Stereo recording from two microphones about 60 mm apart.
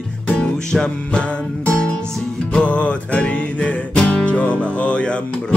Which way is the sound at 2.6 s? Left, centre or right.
Left.